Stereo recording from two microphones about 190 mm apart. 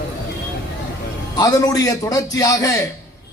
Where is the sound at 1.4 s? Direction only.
20° left (ahead or behind).